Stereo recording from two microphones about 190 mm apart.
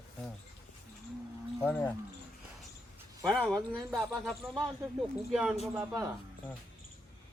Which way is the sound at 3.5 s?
Centre (ahead or behind).